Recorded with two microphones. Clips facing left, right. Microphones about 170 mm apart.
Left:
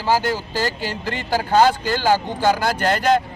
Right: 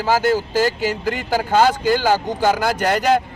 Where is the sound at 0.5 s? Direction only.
10° right (ahead or behind).